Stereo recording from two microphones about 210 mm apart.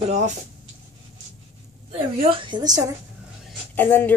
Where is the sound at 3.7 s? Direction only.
10° left (ahead or behind).